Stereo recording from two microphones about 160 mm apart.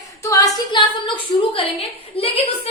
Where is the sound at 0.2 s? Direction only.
20° left (ahead or behind).